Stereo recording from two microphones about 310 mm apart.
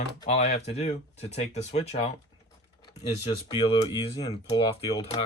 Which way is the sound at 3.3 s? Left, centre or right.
Centre.